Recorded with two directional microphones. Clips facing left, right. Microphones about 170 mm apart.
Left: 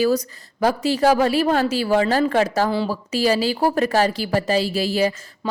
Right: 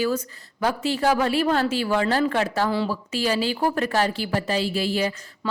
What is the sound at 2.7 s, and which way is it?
Speech, 20° left (ahead or behind).